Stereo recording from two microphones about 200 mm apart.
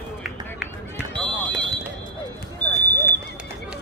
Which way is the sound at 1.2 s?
25° right (ahead or behind).